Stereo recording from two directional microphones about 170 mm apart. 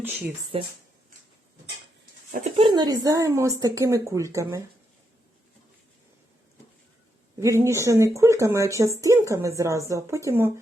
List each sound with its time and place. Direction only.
0.0 s speech: 5° right (ahead or behind)
0.5 s speech: 35° right (ahead or behind)
2.6 s speech: 30° right (ahead or behind)
7.3 s speech: 15° right (ahead or behind)